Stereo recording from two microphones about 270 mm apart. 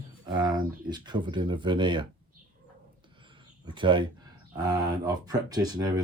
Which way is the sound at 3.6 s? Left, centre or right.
Centre.